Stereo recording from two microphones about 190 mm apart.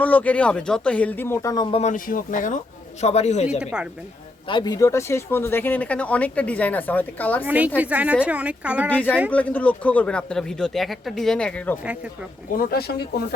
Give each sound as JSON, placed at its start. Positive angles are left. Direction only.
{"t": 0.0, "sound": "speech", "side_deg": 10}
{"t": 1.8, "sound": "a man's voice", "side_deg": 45}
{"t": 3.6, "sound": "speech", "side_deg": -5}
{"t": 4.4, "sound": "speech", "side_deg": 25}
{"t": 7.4, "sound": "a woman's voice", "side_deg": -10}
{"t": 8.9, "sound": "speech", "side_deg": 10}
{"t": 11.8, "sound": "a woman's voice", "side_deg": -5}
{"t": 12.5, "sound": "speech", "side_deg": 50}